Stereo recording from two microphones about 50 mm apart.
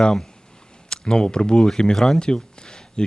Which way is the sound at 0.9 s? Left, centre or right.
Centre.